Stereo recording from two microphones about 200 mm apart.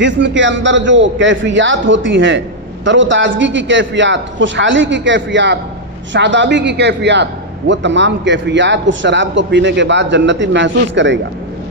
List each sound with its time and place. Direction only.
0.0 s a man's voice: 65° right (ahead or behind)